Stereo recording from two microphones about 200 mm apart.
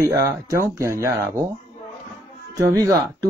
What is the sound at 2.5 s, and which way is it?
Speech, 15° right (ahead or behind).